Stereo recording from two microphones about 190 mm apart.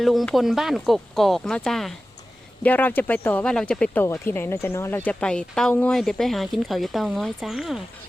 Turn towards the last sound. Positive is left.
turn(degrees=0)  # may be behind; listen again after turning